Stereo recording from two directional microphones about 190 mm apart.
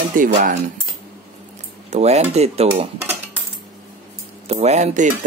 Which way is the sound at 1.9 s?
35° right (ahead or behind).